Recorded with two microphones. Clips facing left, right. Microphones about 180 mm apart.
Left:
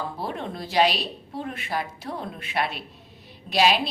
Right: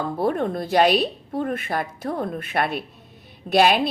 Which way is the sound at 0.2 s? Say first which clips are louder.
Right 9 dB; 50° right (ahead or behind).